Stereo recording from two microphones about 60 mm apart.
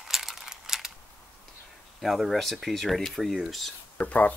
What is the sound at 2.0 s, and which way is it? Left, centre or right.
Speech, centre.